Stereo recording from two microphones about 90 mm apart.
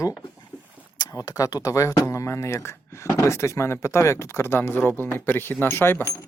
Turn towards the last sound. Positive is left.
turn(degrees=25)  # may be behind; listen again after turning